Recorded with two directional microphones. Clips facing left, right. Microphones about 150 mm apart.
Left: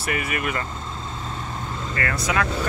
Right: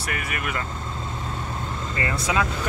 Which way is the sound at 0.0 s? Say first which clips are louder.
Left 4 dB; 5° left (ahead or behind).